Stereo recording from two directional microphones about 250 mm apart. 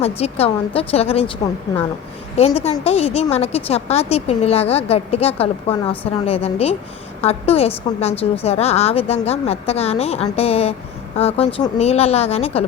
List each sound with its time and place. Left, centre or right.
0.2 s a woman's voice: left